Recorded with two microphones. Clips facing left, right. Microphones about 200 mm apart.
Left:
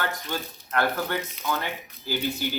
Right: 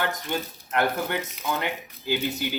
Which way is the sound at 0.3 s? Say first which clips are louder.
Right 3 dB; 20° right (ahead or behind).